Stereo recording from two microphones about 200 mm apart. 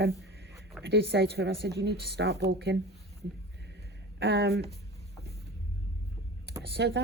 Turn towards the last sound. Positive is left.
turn(degrees=-55)  # may be behind; listen again after turning